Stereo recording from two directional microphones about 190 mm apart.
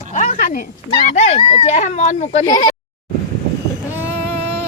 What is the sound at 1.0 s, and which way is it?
Speech, 40° left (ahead or behind).